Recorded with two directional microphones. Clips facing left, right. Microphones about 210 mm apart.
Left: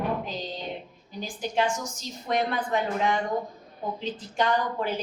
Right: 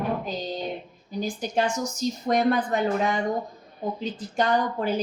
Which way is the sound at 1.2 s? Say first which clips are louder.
Right 2 dB; 40° right (ahead or behind).